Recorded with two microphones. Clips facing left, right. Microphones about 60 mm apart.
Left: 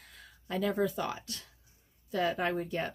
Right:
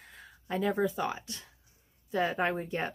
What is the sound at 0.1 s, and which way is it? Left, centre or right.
Speech, right.